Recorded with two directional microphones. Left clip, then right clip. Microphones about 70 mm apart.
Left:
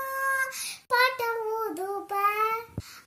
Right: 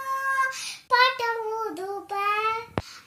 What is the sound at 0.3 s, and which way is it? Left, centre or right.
Child singing, left.